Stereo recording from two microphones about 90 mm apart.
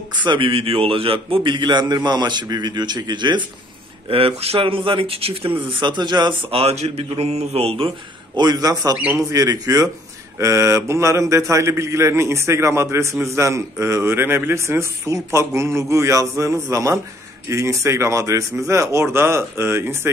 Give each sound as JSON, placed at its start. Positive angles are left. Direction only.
{"t": 0.2, "sound": "speech", "side_deg": -65}
{"t": 1.4, "sound": "a man's voice", "side_deg": -55}
{"t": 4.1, "sound": "speech", "side_deg": -90}
{"t": 6.5, "sound": "speech", "side_deg": -90}
{"t": 8.4, "sound": "a man's voice", "side_deg": -45}